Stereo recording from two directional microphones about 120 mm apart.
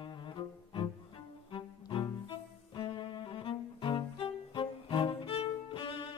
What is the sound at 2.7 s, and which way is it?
Cello, 40° left (ahead or behind).